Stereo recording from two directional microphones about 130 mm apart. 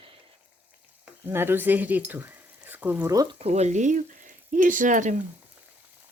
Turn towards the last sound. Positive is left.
turn(degrees=-80)